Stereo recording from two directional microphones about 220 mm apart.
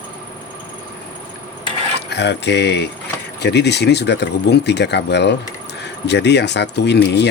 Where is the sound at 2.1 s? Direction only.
50° left (ahead or behind).